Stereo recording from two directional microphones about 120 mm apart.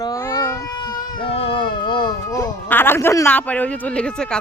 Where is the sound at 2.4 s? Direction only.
20° left (ahead or behind).